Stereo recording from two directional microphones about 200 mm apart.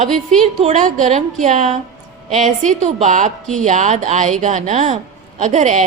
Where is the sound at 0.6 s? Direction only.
35° right (ahead or behind).